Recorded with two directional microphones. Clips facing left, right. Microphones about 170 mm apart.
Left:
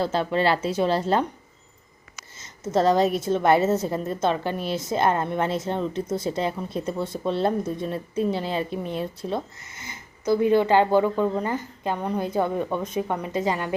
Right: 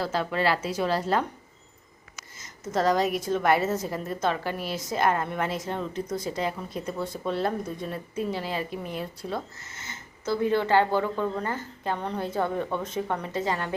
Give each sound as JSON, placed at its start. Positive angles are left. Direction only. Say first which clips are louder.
{"t": 0.0, "sound": "a woman's voice", "louder": "left 4 dB", "side_deg": 25}
{"t": 2.4, "sound": "a woman's voice", "louder": "left 4 dB", "side_deg": 25}